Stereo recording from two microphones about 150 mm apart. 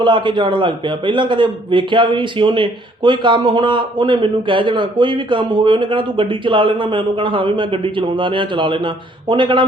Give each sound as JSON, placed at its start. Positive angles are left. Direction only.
{"t": 0.0, "sound": "a man's voice", "side_deg": -30}